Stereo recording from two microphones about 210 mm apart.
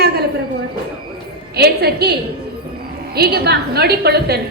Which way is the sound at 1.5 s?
50° right (ahead or behind).